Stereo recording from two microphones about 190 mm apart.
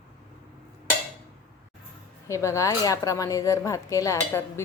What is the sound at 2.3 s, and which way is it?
Speech, 15° left (ahead or behind).